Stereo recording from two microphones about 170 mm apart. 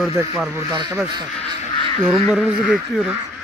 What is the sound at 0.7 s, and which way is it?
Speech, 25° right (ahead or behind).